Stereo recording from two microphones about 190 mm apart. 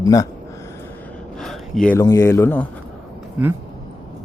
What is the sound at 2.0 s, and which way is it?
Speech, 15° left (ahead or behind).